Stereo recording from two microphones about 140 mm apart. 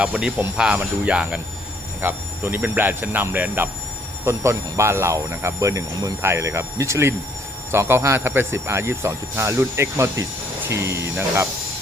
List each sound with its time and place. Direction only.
0.0 s speech: 5° right (ahead or behind)